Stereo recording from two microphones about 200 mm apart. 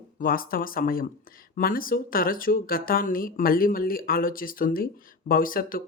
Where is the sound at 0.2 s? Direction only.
45° left (ahead or behind).